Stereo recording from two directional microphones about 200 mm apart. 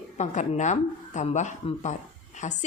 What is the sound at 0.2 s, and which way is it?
Speech, 35° left (ahead or behind).